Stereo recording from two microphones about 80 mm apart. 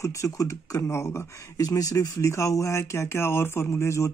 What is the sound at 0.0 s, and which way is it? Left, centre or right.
Speech, left.